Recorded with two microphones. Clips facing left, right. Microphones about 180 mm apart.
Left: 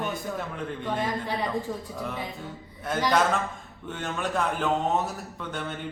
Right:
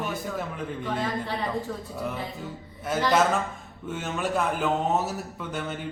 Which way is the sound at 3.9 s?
5° right (ahead or behind).